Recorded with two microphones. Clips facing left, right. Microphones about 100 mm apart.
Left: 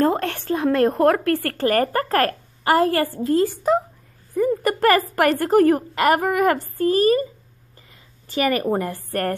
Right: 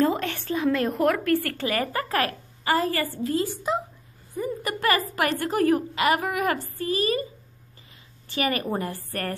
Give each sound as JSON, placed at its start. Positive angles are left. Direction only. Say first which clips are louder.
{"t": 0.0, "sound": "a woman's voice", "louder": "left 3 dB", "side_deg": 45}
{"t": 8.7, "sound": "a woman's voice", "louder": "left 6 dB", "side_deg": 45}